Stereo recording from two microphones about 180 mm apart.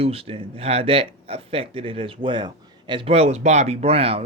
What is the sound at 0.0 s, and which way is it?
Speech, 30° right (ahead or behind).